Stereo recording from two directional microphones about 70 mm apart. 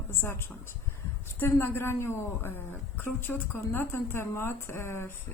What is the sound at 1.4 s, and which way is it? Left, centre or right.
Speech, left.